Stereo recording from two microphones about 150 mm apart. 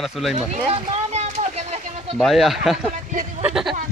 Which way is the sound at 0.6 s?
40° right (ahead or behind).